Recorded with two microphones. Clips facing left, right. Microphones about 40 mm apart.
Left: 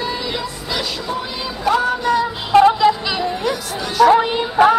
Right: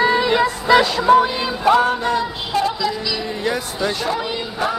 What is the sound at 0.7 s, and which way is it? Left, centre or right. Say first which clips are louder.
Music: right 10 dB; right.